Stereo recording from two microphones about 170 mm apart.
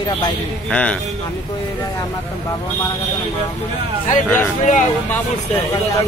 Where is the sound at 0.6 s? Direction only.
5° left (ahead or behind).